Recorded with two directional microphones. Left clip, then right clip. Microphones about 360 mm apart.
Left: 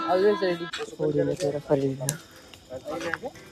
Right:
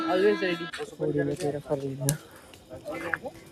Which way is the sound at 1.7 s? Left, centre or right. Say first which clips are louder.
Left 8 dB; left.